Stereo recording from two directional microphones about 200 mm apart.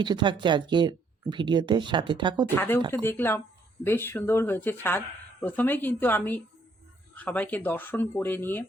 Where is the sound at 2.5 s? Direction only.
10° left (ahead or behind).